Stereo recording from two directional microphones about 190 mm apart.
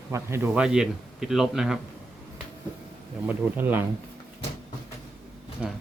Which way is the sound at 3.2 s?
10° right (ahead or behind).